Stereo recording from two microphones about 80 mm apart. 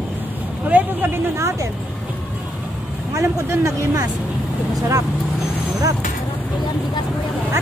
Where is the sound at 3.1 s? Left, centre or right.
Right.